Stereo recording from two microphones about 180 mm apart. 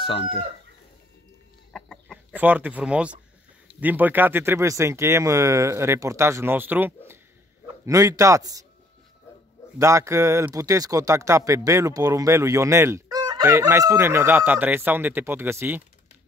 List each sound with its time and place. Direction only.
0.0 s chicken: 30° left (ahead or behind)
1.7 s chicken: 5° left (ahead or behind)
2.3 s a man's voice: 10° right (ahead or behind)
9.8 s speech: 15° right (ahead or behind)